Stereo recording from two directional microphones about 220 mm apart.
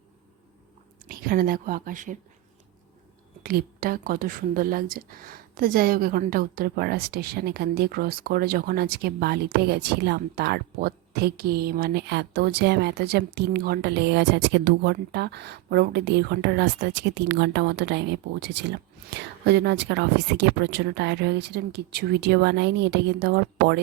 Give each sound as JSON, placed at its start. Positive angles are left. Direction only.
{"t": 1.0, "sound": "speech", "side_deg": -40}
{"t": 3.4, "sound": "speech", "side_deg": -40}